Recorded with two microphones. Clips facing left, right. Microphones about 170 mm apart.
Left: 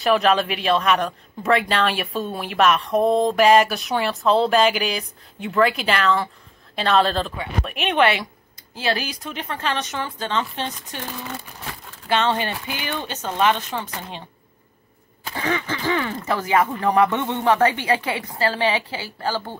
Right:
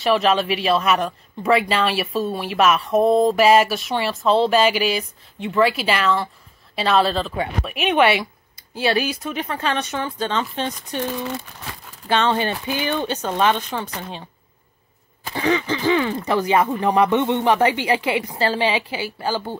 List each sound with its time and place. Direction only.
0.0 s speech: centre (ahead or behind)
12.3 s speech: 15° right (ahead or behind)
15.3 s speech: 15° right (ahead or behind)